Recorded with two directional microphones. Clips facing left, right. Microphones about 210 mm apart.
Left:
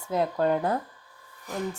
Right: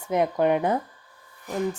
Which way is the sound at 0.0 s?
20° right (ahead or behind).